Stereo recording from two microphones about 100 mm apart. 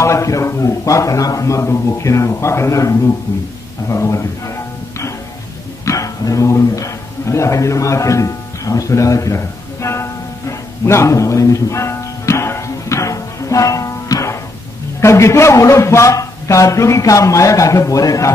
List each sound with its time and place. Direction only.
0.0 s a man's voice: 30° left (ahead or behind)
5.9 s speech: 35° left (ahead or behind)
10.9 s music: 30° left (ahead or behind)
15.0 s a man's voice: 30° left (ahead or behind)